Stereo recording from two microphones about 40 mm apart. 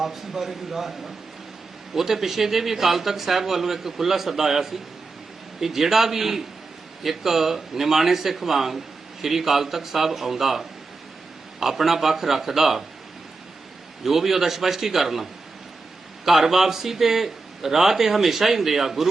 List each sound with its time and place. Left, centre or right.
0.0 s a man's voice: centre
14.0 s a man's voice: centre